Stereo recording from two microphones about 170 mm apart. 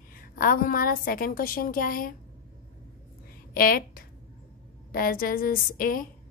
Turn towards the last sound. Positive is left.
turn(degrees=55)  # may be behind; listen again after turning